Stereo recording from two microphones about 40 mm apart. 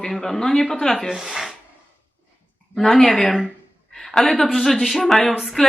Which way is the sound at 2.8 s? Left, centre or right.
Centre.